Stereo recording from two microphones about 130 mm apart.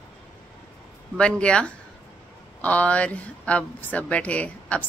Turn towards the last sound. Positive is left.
turn(degrees=10)  # may be behind; listen again after turning